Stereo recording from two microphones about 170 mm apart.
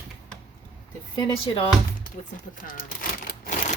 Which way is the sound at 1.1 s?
30° left (ahead or behind).